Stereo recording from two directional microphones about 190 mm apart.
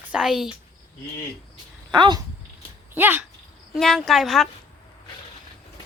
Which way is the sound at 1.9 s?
25° right (ahead or behind).